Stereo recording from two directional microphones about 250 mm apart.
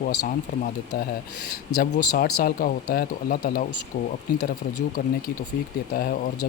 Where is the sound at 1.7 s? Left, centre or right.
Left.